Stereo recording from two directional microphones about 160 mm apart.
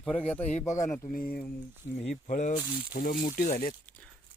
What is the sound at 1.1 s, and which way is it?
Speech, 65° left (ahead or behind).